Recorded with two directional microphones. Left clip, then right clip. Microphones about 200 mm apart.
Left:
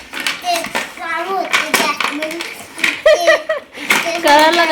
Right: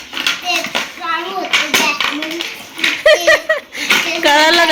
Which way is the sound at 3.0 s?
5° left (ahead or behind).